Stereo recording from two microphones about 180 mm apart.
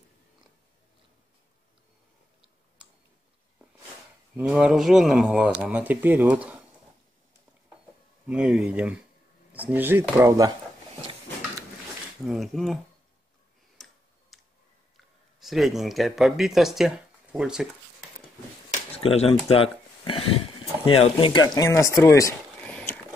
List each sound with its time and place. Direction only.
4.4 s speech: 5° right (ahead or behind)
8.3 s speech: 5° right (ahead or behind)
12.3 s speech: centre (ahead or behind)
13.8 s tick-tock: centre (ahead or behind)
14.3 s a sound: centre (ahead or behind)
15.4 s speech: centre (ahead or behind)
18.7 s a sound: 35° left (ahead or behind)
19.5 s speech: 30° left (ahead or behind)
22.6 s a sound: 5° left (ahead or behind)